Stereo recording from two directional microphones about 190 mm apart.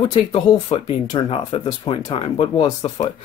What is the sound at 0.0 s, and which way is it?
Speech, 25° left (ahead or behind).